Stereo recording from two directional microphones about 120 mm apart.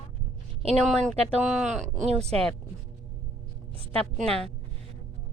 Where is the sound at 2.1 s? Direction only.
60° right (ahead or behind).